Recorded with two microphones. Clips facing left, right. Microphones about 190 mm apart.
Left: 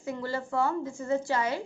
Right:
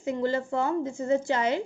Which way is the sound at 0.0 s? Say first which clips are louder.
Right 6 dB; 20° right (ahead or behind).